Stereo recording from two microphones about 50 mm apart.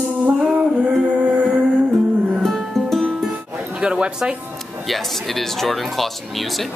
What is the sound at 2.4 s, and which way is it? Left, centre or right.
Music, centre.